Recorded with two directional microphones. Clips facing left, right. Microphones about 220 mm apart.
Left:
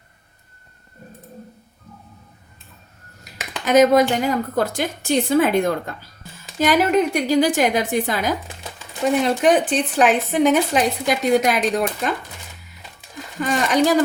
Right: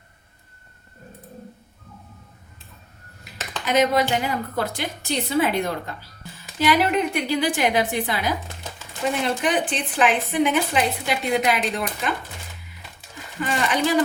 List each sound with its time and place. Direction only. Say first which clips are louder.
3.7 s speech: left 6 dB; 45° left (ahead or behind)
13.4 s speech: left 5 dB; 40° left (ahead or behind)